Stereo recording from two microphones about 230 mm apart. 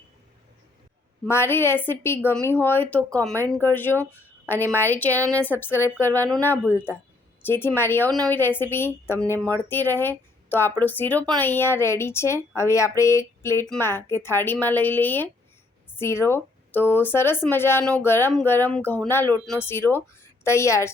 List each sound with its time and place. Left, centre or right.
1.2 s speech: centre
3.9 s speech: centre
4.4 s a woman's voice: centre
6.7 s speech: centre
7.4 s speech: centre